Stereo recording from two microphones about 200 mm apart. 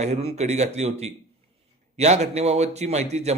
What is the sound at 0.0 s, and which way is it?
A man's voice, 30° right (ahead or behind).